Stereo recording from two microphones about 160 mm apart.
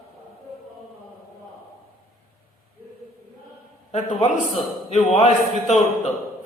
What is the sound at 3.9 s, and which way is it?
A man's voice, 45° left (ahead or behind).